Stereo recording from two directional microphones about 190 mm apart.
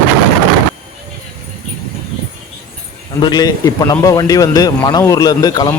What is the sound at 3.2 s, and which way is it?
A man's voice, 20° left (ahead or behind).